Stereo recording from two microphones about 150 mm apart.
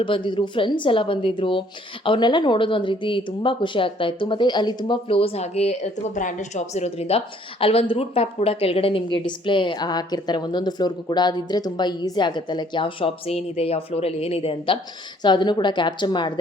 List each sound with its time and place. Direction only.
0.0 s a woman's voice: 35° left (ahead or behind)
15.2 s a woman's voice: 30° left (ahead or behind)